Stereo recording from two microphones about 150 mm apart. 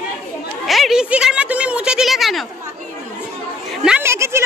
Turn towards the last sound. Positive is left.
turn(degrees=-15)  # may be behind; listen again after turning